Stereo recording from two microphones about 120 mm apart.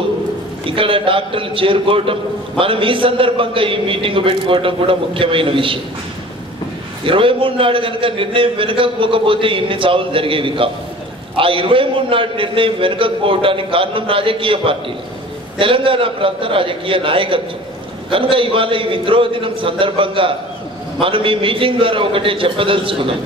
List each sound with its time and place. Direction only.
0.7 s a man's voice: 45° right (ahead or behind)
7.1 s a man's voice: 45° right (ahead or behind)